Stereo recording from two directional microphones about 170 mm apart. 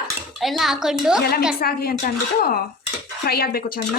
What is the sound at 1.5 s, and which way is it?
A child's voice, 60° left (ahead or behind).